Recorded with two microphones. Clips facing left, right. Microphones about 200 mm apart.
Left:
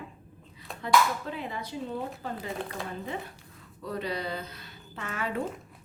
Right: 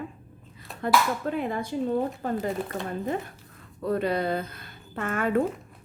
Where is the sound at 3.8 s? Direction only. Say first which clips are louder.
Right 8 dB; 55° right (ahead or behind).